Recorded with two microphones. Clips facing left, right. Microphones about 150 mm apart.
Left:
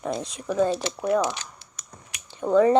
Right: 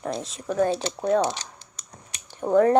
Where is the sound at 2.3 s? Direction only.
15° right (ahead or behind).